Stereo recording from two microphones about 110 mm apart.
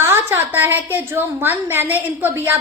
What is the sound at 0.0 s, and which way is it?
A woman's voice, 20° right (ahead or behind).